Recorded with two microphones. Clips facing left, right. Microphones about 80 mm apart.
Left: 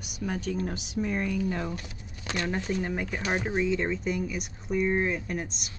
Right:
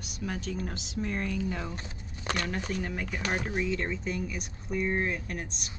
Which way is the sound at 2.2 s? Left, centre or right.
Right.